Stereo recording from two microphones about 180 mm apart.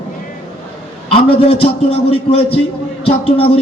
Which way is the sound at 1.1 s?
30° left (ahead or behind).